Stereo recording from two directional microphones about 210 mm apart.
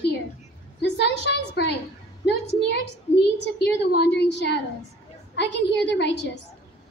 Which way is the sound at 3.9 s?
50° left (ahead or behind).